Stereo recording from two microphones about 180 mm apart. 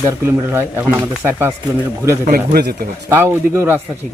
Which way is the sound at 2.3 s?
55° right (ahead or behind).